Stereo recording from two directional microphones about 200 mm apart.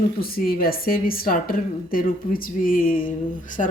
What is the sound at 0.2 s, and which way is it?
A woman's voice, 50° left (ahead or behind).